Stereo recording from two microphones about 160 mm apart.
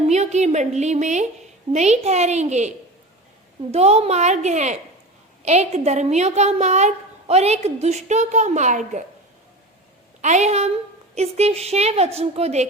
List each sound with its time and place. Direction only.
0.1 s a woman's voice: 45° right (ahead or behind)
10.2 s a woman's voice: 45° right (ahead or behind)